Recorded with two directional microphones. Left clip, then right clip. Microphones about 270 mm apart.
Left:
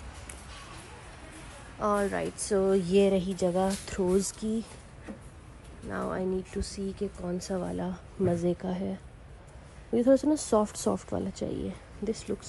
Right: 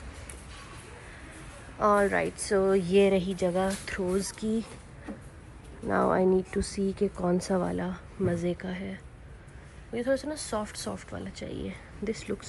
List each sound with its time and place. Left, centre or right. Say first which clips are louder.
1.8 s speech: right 4 dB; centre
5.9 s speech: right 8 dB; centre
9.9 s speech: left 5 dB; left